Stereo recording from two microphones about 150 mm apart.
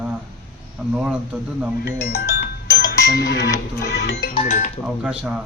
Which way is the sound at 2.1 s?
90° left.